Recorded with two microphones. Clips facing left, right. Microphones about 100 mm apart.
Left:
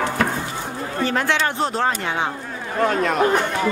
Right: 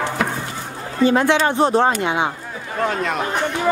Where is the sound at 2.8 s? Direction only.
Centre (ahead or behind).